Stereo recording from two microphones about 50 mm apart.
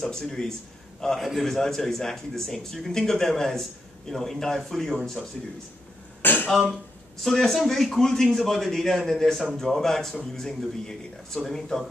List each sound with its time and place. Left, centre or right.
0.0 s a man's voice: centre
6.2 s throat clearing: left
7.2 s a man's voice: centre